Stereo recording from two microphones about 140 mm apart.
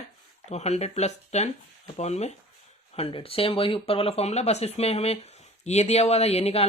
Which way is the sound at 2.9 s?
40° left (ahead or behind).